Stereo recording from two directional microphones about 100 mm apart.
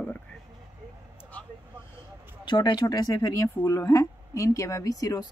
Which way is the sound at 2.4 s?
50° left (ahead or behind).